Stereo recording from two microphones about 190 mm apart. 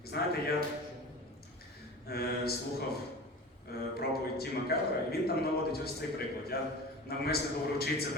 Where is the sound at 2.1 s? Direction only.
55° left (ahead or behind).